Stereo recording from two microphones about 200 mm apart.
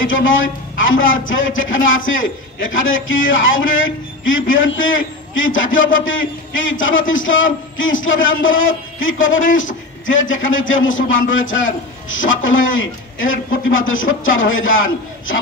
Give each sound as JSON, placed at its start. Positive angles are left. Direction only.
{"t": 0.0, "sound": "a man's voice", "side_deg": 75}